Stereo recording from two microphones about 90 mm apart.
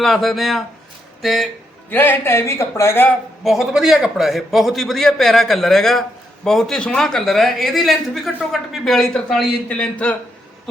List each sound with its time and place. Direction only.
0.0 s a man's voice: centre (ahead or behind)
1.9 s speech: 20° left (ahead or behind)
3.4 s a man's voice: 5° right (ahead or behind)